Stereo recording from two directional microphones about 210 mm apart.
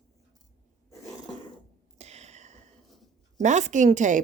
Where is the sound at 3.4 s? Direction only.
35° right (ahead or behind).